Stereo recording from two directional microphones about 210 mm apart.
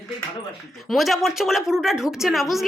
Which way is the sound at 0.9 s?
Centre (ahead or behind).